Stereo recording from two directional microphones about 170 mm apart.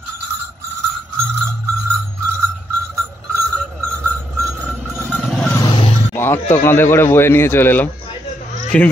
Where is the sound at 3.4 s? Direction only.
10° left (ahead or behind).